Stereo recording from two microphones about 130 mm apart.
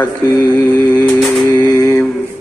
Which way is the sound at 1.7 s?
25° left (ahead or behind).